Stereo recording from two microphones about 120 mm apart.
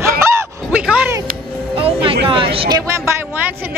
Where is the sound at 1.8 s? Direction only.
50° right (ahead or behind).